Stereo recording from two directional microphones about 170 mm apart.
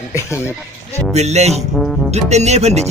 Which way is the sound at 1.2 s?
40° right (ahead or behind).